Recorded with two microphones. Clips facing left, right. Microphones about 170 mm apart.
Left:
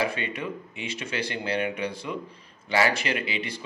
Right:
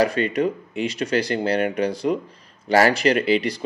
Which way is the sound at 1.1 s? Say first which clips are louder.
Right 7 dB; 40° right (ahead or behind).